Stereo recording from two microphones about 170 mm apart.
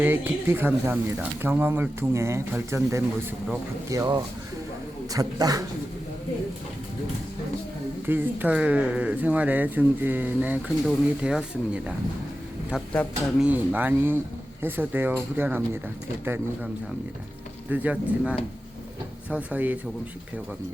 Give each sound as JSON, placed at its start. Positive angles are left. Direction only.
{"t": 0.0, "sound": "a man's voice", "side_deg": -10}
{"t": 8.0, "sound": "speech", "side_deg": -10}
{"t": 13.4, "sound": "speech", "side_deg": -10}
{"t": 17.7, "sound": "speech", "side_deg": -10}